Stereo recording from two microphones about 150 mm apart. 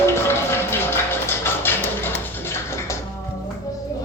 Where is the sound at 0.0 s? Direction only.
15° left (ahead or behind).